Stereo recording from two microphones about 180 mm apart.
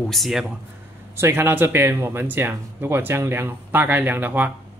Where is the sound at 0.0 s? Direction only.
Centre (ahead or behind).